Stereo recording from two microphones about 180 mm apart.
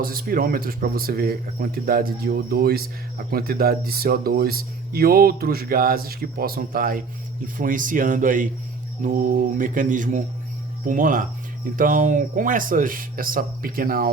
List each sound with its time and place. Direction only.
0.0 s speech: 55° right (ahead or behind)